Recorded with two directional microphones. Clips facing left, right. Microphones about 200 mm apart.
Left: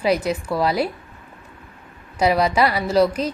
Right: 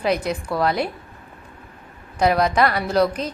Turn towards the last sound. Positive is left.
turn(degrees=5)  # may be behind; listen again after turning